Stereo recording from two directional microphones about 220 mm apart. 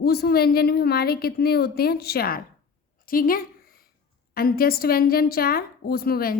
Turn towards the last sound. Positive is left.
turn(degrees=45)  # may be behind; listen again after turning